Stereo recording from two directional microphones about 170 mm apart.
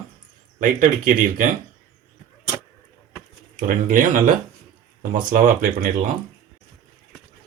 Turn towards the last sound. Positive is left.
turn(degrees=-50)  # may be behind; listen again after turning